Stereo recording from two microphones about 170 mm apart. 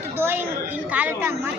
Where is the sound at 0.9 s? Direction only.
10° right (ahead or behind).